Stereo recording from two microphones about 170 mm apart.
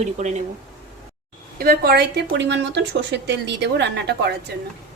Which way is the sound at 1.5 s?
65° right (ahead or behind).